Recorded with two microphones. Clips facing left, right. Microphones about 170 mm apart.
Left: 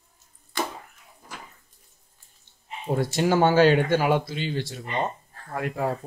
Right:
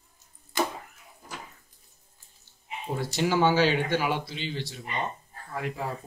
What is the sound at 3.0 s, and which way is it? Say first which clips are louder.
Speech: left 3 dB; 50° left (ahead or behind).